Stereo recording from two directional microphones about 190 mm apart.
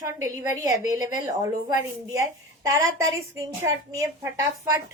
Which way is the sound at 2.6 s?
15° right (ahead or behind).